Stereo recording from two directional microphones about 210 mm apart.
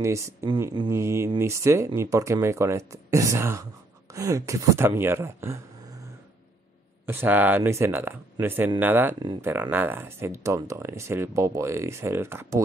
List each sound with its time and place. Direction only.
0.0 s speech: 15° right (ahead or behind)
7.1 s speech: 10° right (ahead or behind)
9.2 s speech: 20° right (ahead or behind)
9.5 s speech: 10° right (ahead or behind)